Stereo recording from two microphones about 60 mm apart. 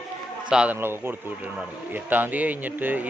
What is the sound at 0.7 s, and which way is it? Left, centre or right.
Speech, right.